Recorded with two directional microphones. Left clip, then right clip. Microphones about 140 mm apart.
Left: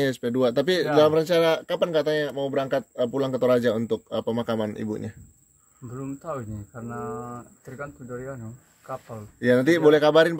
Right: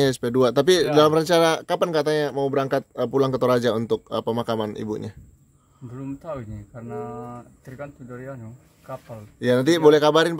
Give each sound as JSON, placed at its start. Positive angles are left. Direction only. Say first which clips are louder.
{"t": 0.0, "sound": "speech", "louder": "right 3 dB", "side_deg": -55}
{"t": 5.9, "sound": "speech", "louder": "even", "side_deg": -15}
{"t": 9.4, "sound": "speech", "louder": "right 1 dB", "side_deg": -45}